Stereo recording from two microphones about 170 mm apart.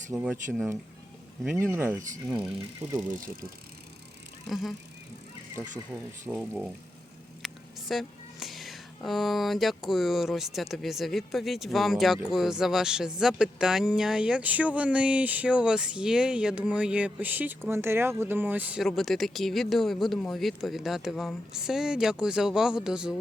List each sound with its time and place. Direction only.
0.1 s speech: 5° right (ahead or behind)
1.5 s speech: 15° right (ahead or behind)
3.2 s speech: 55° right (ahead or behind)
4.4 s speech: centre (ahead or behind)
6.2 s speech: 10° right (ahead or behind)